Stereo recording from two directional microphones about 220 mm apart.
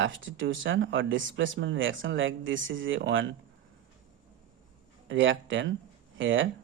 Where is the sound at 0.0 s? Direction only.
60° right (ahead or behind).